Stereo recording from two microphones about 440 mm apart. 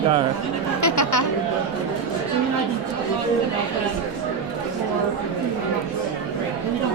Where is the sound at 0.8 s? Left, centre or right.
Left.